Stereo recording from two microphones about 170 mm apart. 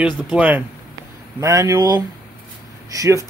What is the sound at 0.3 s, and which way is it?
A man's voice, 10° right (ahead or behind).